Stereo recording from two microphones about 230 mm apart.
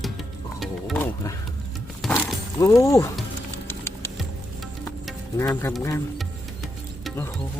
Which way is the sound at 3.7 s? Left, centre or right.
Centre.